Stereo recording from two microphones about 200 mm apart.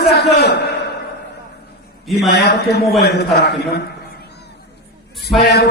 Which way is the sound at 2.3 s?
55° left (ahead or behind).